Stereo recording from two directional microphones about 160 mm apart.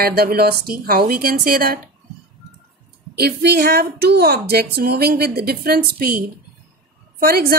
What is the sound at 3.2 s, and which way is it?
A woman's voice, 85° right.